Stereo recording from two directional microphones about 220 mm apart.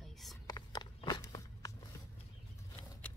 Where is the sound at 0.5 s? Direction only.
20° left (ahead or behind).